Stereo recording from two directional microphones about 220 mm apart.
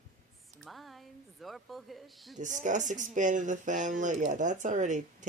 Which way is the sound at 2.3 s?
35° right (ahead or behind).